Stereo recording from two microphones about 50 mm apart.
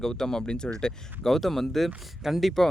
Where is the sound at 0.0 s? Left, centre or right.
Centre.